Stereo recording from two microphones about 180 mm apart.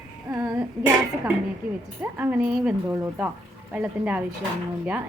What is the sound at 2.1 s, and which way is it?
Speech, 10° right (ahead or behind).